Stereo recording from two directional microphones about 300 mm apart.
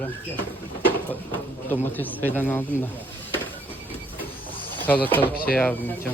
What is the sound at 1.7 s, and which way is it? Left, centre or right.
Speech, centre.